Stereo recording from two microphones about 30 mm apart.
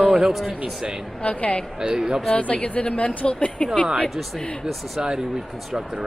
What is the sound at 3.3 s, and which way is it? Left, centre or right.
Speech, left.